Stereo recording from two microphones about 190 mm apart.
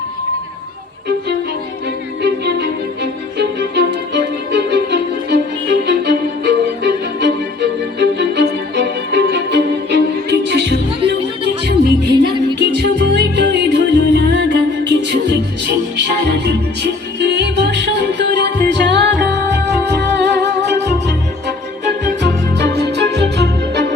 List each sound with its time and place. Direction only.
2.2 s music: 60° right (ahead or behind)
7.9 s violin: 60° right (ahead or behind)
12.1 s music: 25° right (ahead or behind)
12.7 s music: 60° right (ahead or behind)
22.0 s music: 65° right (ahead or behind)